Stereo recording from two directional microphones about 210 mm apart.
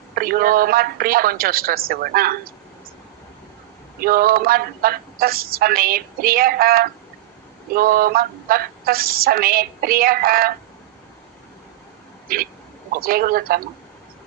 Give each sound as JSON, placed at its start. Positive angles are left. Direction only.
{"t": 0.1, "sound": "speech", "side_deg": -45}
{"t": 4.0, "sound": "speech", "side_deg": -45}
{"t": 12.3, "sound": "speech", "side_deg": -45}